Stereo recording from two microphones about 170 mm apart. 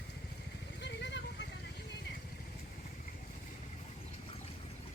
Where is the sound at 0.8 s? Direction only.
90° left.